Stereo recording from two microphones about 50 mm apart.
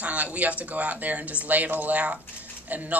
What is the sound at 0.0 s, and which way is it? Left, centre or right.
Speech, right.